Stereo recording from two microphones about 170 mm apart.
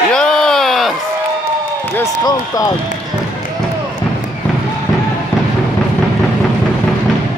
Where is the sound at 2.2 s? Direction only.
20° left (ahead or behind).